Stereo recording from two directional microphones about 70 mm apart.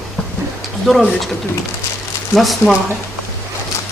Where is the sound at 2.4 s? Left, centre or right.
Centre.